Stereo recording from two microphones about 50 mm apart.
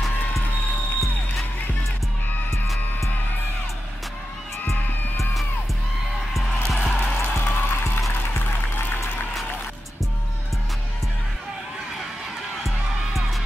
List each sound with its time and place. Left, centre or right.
6.3 s music: centre
6.9 s music: left
7.3 s music: left
12.6 s music: centre